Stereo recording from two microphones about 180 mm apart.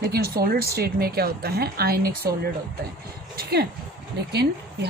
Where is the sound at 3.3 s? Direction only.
60° right (ahead or behind).